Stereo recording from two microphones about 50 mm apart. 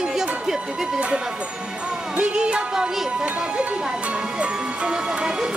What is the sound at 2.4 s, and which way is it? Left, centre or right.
Speech, centre.